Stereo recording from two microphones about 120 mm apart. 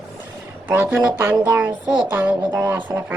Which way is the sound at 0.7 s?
15° right (ahead or behind).